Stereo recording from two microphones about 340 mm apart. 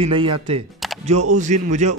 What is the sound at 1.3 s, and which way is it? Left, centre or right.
Speech, right.